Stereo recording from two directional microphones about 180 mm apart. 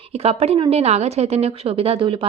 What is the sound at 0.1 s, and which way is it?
A woman's voice, 35° right (ahead or behind).